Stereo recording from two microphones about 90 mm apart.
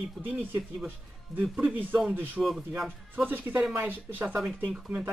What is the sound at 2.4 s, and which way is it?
Speech, 5° right (ahead or behind).